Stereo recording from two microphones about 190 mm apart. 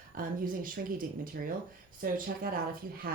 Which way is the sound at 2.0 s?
50° right (ahead or behind).